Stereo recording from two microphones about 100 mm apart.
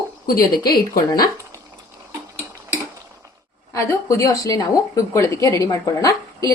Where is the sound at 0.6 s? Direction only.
45° left (ahead or behind).